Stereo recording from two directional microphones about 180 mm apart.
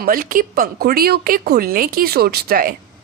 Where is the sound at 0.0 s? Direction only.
50° right (ahead or behind).